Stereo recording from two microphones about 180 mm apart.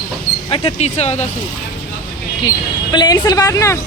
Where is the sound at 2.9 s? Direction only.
20° left (ahead or behind).